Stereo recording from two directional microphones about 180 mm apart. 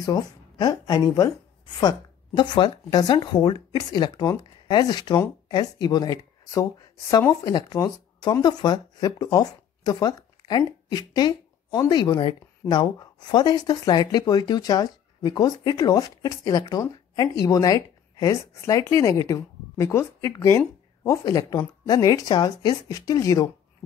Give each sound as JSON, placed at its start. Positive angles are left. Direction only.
{"t": 0.0, "sound": "speech", "side_deg": 20}